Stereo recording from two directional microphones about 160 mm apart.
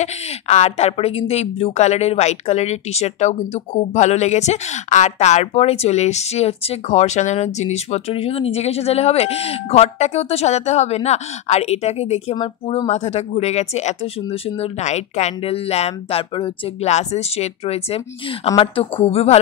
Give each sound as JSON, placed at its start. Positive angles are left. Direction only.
{"t": 0.0, "sound": "a woman's voice", "side_deg": 45}